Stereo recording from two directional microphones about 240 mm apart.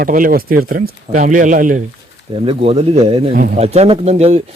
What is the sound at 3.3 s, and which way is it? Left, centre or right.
Speech, right.